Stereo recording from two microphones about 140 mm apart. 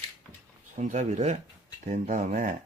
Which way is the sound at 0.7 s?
60° right (ahead or behind).